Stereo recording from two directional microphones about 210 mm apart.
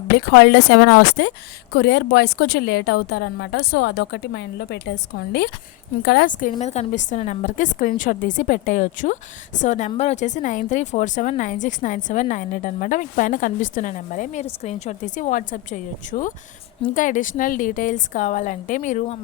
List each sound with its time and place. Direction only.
0.2 s a woman's voice: 50° left (ahead or behind); by 19.2 s 35° left (ahead or behind)